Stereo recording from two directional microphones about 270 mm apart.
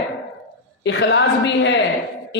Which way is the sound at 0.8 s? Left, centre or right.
Left.